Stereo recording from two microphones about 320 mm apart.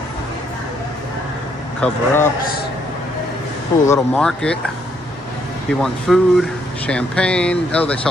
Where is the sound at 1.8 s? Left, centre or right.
Centre.